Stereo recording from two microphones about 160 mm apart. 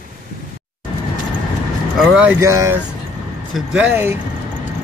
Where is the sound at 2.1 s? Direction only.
10° right (ahead or behind).